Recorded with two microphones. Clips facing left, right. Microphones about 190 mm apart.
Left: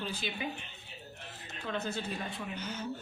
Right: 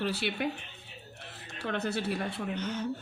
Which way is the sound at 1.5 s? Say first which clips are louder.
Right 4 dB; 70° right (ahead or behind).